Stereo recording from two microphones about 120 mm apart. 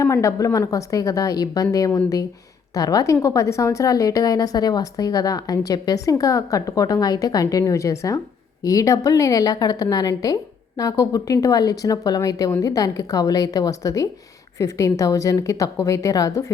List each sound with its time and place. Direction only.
0.0 s a woman's voice: 25° left (ahead or behind)